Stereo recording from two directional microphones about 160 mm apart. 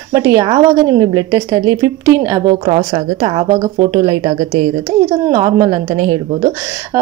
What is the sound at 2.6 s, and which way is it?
A woman's voice, 45° right (ahead or behind).